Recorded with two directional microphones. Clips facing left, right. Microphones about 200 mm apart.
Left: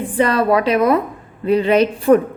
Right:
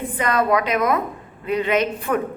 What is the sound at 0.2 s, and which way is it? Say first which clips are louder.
A woman's voice: left 5 dB; 30° left (ahead or behind).